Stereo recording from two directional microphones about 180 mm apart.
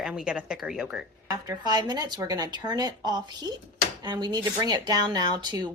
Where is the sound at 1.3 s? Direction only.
20° right (ahead or behind).